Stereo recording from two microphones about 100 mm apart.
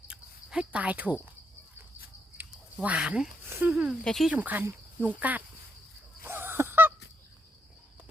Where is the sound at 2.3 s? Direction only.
15° right (ahead or behind).